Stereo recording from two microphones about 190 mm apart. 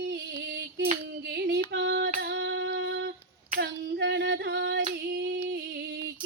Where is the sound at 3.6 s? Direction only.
65° right (ahead or behind).